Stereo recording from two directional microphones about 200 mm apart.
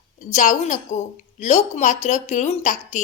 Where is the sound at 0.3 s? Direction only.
35° left (ahead or behind).